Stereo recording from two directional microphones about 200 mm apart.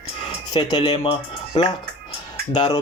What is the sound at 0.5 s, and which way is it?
Speech, 20° left (ahead or behind).